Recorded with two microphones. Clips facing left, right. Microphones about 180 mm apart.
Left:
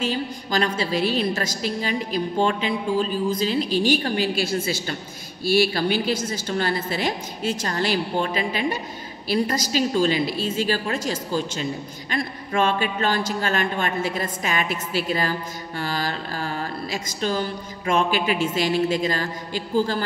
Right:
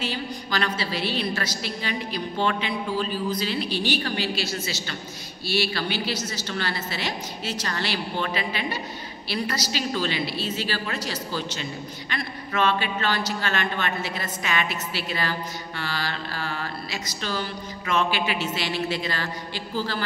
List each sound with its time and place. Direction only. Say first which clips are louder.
0.0 s mantra: left 4 dB; 45° left (ahead or behind)